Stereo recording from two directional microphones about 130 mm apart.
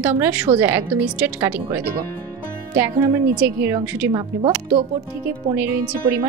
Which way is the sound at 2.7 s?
20° right (ahead or behind).